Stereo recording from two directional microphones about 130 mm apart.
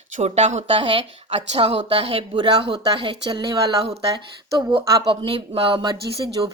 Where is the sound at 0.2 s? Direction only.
60° right (ahead or behind).